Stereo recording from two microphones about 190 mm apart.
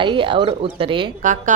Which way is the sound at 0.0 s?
25° right (ahead or behind).